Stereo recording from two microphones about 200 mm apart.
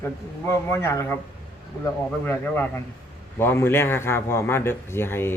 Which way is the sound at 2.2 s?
10° left (ahead or behind).